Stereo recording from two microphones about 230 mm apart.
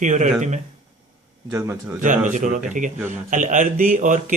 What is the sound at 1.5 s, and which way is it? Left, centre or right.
Speech, centre.